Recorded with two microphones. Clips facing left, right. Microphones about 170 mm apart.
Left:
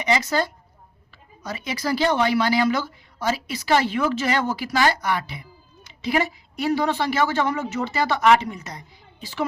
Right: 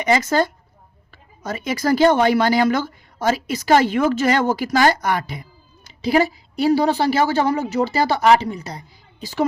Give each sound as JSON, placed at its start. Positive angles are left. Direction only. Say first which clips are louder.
{"t": 0.0, "sound": "a woman's voice", "louder": "right 4 dB", "side_deg": -50}